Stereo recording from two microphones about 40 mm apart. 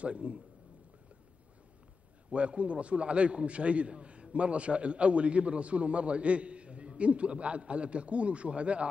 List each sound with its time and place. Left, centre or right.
0.0 s a man's voice: right
2.3 s a man's voice: right